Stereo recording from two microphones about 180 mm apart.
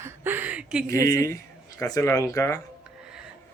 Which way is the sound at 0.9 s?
15° left (ahead or behind).